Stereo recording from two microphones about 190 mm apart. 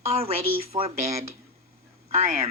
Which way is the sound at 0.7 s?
30° right (ahead or behind).